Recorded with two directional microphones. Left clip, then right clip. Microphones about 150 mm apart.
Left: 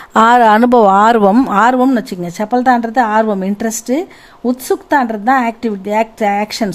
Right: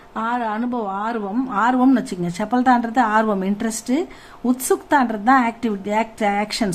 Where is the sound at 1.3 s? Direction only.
90° left; by 4.0 s 45° left (ahead or behind).